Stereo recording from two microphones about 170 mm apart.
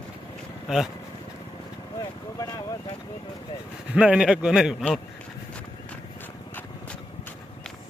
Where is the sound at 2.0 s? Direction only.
20° left (ahead or behind).